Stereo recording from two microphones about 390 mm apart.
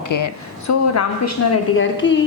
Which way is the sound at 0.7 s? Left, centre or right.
Left.